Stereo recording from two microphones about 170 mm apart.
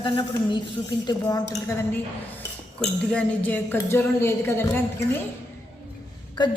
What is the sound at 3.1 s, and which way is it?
A woman's voice, 10° left (ahead or behind).